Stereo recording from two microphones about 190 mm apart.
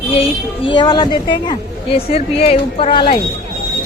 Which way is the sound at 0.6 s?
25° left (ahead or behind).